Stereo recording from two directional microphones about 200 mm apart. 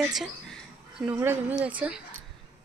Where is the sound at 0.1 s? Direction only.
Centre (ahead or behind).